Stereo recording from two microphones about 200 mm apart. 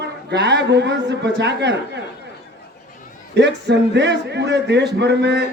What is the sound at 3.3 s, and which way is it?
A man's voice, 60° right (ahead or behind).